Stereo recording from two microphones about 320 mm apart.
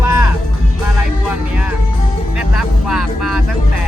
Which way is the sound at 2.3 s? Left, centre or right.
Centre.